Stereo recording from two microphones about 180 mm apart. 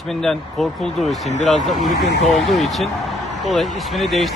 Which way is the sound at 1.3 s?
40° left (ahead or behind).